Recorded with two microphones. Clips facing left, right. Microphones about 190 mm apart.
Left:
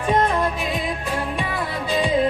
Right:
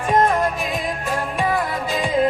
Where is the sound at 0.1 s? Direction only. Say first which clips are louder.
Right 2 dB; 45° right (ahead or behind).